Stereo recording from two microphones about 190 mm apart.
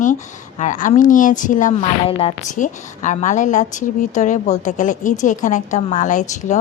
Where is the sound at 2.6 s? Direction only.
40° left (ahead or behind).